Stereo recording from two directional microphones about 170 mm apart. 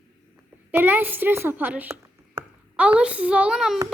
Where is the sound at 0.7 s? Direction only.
10° right (ahead or behind).